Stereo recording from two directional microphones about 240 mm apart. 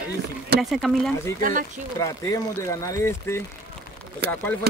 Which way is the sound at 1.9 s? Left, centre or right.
Centre.